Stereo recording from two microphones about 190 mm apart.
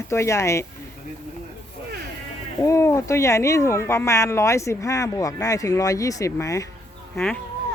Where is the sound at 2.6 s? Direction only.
15° left (ahead or behind).